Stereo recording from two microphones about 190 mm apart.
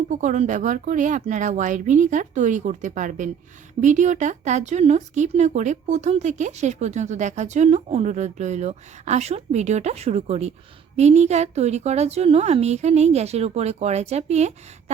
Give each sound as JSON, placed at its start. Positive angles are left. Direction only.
{"t": 0.1, "sound": "speech", "side_deg": -40}